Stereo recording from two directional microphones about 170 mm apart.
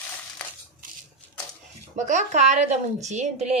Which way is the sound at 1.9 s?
45° right (ahead or behind).